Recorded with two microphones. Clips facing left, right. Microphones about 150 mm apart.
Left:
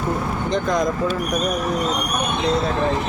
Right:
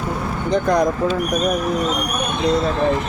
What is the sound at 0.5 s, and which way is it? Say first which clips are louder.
Speech: right 4 dB; 65° right (ahead or behind).